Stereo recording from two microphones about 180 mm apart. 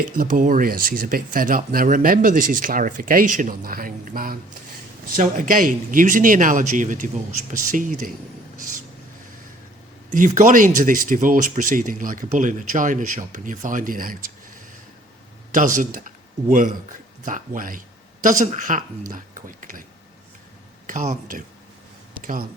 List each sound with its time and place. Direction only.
0.2 s speech: 45° right (ahead or behind)
10.1 s a man's voice: 45° right (ahead or behind)
20.8 s speech: 45° right (ahead or behind)